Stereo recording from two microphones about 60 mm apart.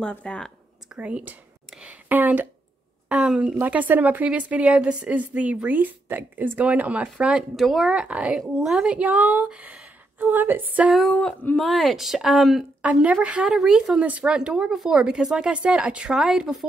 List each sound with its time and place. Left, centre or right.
0.2 s speech: centre
0.9 s a woman's voice: right
1.9 s a sound: right
3.1 s speech: centre
3.6 s a woman's voice: right
7.5 s speech: centre
7.9 s a woman's voice: centre
8.9 s a woman's voice: right
11.1 s speech: centre
11.5 s speech: centre
12.8 s a woman's voice: right
13.5 s speech: centre